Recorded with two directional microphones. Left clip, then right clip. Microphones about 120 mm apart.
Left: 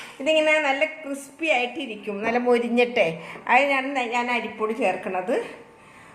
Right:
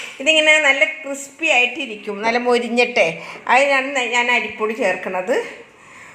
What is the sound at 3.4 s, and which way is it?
Speech, 25° right (ahead or behind).